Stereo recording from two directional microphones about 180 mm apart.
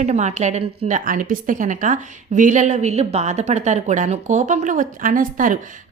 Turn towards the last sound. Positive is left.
turn(degrees=-50)  # may be behind; listen again after turning